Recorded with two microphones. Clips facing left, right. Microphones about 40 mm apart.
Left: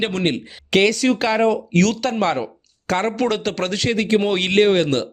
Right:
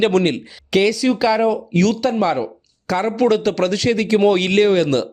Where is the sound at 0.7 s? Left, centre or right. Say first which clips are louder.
Even; left.